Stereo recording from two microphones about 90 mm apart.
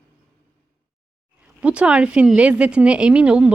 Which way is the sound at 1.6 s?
15° right (ahead or behind).